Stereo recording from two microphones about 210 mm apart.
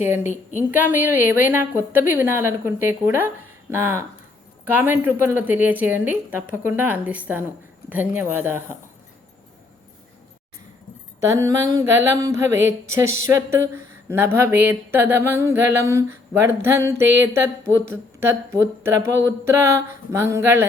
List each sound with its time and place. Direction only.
0.2 s a woman's voice: 35° left (ahead or behind)
0.7 s speech: 10° right (ahead or behind)
11.2 s speech: 15° right (ahead or behind)
13.2 s a sound: 15° right (ahead or behind)
14.3 s speech: 10° right (ahead or behind)